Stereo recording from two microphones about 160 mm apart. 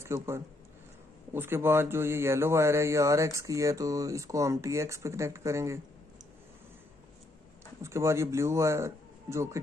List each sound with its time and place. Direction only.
0.0 s speech: 15° right (ahead or behind)
7.8 s speech: 15° right (ahead or behind)